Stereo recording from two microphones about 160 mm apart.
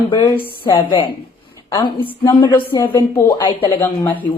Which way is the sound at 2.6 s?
15° left (ahead or behind).